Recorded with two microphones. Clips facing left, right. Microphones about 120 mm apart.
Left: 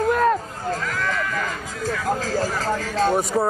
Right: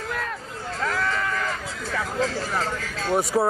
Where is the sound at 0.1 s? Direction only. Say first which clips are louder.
Left 12 dB; 40° left (ahead or behind).